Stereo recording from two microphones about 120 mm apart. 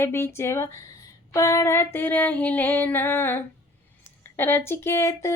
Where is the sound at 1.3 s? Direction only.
25° left (ahead or behind).